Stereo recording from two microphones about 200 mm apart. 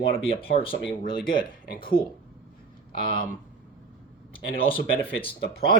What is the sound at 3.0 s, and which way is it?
Speech, 45° left (ahead or behind).